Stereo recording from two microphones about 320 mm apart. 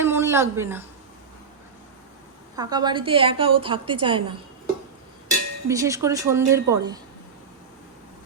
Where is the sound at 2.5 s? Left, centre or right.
Centre.